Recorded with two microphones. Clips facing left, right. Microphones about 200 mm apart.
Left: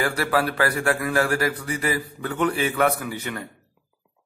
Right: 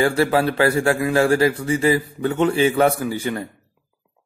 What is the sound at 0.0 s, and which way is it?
A man's voice, 25° right (ahead or behind).